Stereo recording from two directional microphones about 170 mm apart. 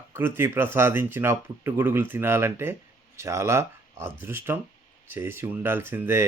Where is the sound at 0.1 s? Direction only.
10° right (ahead or behind).